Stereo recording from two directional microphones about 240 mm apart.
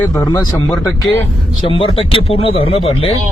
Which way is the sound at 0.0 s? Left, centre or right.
Centre.